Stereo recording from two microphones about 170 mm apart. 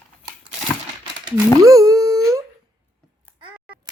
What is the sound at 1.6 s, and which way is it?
Wail, 20° right (ahead or behind).